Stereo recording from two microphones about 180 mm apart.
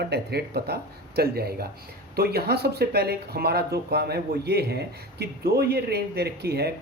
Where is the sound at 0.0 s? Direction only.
65° right (ahead or behind).